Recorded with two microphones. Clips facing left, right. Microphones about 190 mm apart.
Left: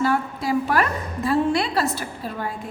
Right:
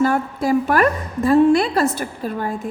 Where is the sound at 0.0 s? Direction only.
50° right (ahead or behind).